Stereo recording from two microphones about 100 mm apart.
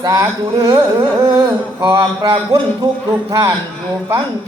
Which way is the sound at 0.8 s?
25° right (ahead or behind).